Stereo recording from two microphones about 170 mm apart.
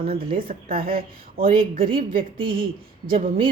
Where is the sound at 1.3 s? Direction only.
35° right (ahead or behind).